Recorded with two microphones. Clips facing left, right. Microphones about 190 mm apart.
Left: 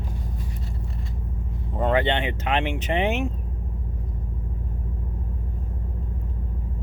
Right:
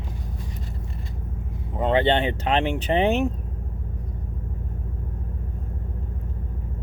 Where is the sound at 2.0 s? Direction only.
35° right (ahead or behind).